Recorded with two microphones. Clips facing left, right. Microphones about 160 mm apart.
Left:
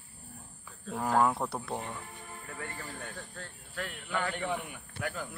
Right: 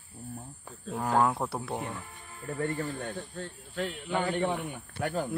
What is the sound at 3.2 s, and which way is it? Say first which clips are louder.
Speech: right 6 dB; 20° right (ahead or behind).